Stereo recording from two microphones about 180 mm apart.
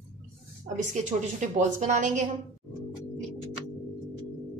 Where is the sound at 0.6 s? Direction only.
40° right (ahead or behind).